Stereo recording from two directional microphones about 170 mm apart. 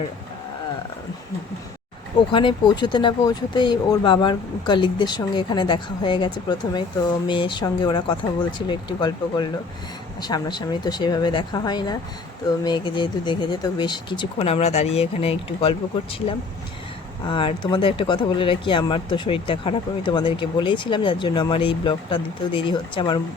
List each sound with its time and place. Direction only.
2.3 s speech: 30° left (ahead or behind)
17.2 s speech: 30° left (ahead or behind)